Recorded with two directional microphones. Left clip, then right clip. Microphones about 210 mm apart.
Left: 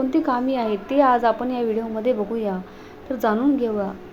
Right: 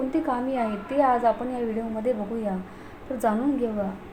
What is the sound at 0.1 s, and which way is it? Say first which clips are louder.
A woman's voice: left 5 dB; 20° left (ahead or behind).